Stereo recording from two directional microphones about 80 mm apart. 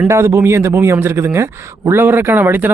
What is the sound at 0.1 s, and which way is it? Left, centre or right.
Speech, right.